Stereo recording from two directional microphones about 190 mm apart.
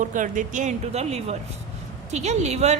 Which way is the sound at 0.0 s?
45° right (ahead or behind).